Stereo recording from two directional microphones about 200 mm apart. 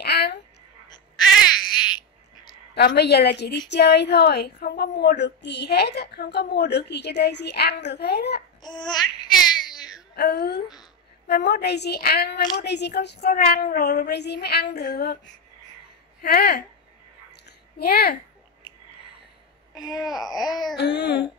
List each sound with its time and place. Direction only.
0.0 s a sound: 55° left (ahead or behind)
1.7 s a sound: 20° left (ahead or behind)
2.7 s a woman's voice: 55° left (ahead or behind)
8.6 s babbling: 20° left (ahead or behind)
10.1 s a woman's voice: 55° left (ahead or behind)
16.2 s speech: 50° left (ahead or behind)
17.3 s a sound: 55° left (ahead or behind)
20.0 s speech: centre (ahead or behind)
20.3 s babbling: 20° left (ahead or behind)
20.7 s a woman's voice: 55° left (ahead or behind)